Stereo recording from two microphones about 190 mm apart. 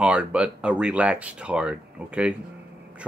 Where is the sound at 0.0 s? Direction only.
5° right (ahead or behind).